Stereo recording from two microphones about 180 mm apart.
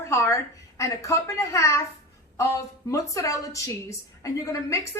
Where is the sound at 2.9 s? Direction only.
20° left (ahead or behind).